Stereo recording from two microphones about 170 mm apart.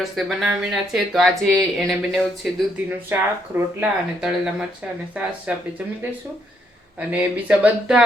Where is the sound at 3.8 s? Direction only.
5° right (ahead or behind).